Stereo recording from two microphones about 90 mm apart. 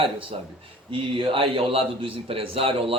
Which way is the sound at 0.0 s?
75° right (ahead or behind).